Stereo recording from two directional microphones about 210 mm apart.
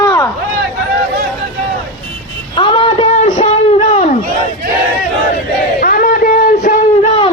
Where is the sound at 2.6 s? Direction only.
25° left (ahead or behind).